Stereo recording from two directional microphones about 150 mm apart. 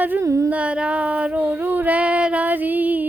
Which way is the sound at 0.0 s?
15° right (ahead or behind).